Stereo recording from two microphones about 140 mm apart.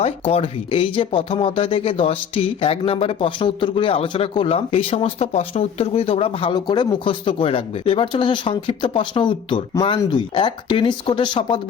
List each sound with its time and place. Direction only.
0.0 s speech: 45° left (ahead or behind)